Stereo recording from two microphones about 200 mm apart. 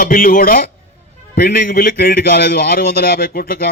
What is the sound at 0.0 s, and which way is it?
A man's voice, 45° left (ahead or behind).